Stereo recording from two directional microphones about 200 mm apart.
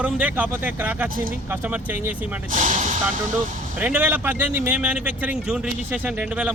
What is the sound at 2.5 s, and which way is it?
Speech, 35° right (ahead or behind).